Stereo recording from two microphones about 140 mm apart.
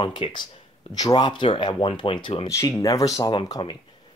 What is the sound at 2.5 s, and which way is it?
Speech, 25° left (ahead or behind).